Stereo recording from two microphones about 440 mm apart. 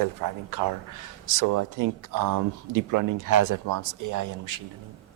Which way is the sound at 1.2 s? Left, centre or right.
Right.